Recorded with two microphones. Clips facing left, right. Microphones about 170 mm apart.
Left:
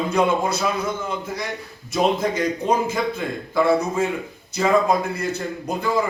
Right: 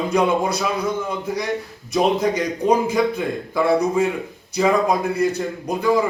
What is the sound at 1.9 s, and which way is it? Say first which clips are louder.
A man's voice: right 2 dB; 15° right (ahead or behind).